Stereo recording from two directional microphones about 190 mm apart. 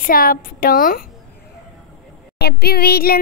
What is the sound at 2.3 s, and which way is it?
Child singing, 55° left (ahead or behind).